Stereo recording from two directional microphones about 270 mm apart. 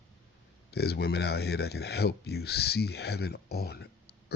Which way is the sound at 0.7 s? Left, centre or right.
Left.